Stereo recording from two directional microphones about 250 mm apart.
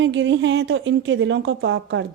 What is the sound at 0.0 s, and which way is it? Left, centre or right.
Speech, right.